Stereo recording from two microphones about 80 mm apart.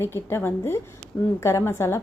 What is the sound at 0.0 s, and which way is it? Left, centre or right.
A woman's voice, left.